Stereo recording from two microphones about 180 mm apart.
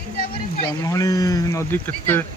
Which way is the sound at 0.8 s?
20° left (ahead or behind).